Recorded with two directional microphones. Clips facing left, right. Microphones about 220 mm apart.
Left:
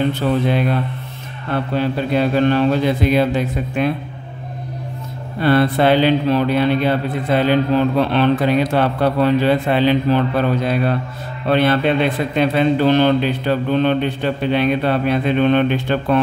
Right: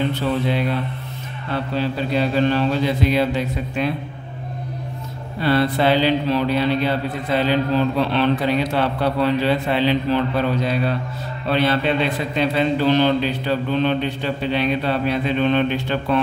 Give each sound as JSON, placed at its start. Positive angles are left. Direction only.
{"t": 1.5, "sound": "speech", "side_deg": 50}
{"t": 5.4, "sound": "speech", "side_deg": 55}